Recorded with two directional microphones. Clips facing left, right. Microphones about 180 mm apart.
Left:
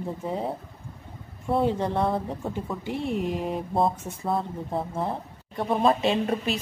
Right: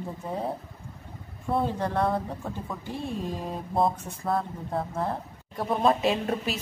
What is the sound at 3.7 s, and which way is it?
Speech, centre (ahead or behind).